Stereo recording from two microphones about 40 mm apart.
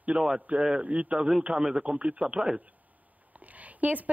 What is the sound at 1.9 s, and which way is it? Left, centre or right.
Speech, right.